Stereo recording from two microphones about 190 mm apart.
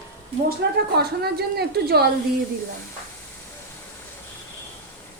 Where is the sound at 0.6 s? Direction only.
60° right (ahead or behind).